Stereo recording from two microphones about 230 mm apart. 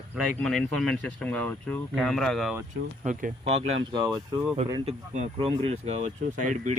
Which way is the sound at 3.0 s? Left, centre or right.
Right.